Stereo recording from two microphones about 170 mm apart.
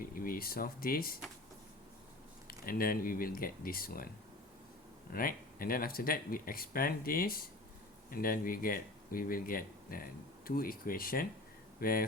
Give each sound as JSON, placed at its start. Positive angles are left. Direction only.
{"t": 0.0, "sound": "speech", "side_deg": 55}
{"t": 2.5, "sound": "speech", "side_deg": 60}
{"t": 5.1, "sound": "speech", "side_deg": 60}